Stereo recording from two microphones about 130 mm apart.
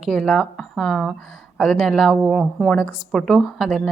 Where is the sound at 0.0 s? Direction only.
Centre (ahead or behind).